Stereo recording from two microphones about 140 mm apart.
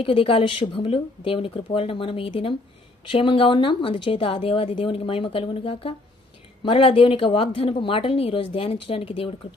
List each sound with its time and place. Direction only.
0.0 s a woman's voice: 40° left (ahead or behind)